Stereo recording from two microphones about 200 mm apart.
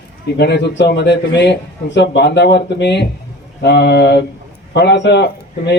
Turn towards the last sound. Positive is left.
turn(degrees=55)  # may be behind; listen again after turning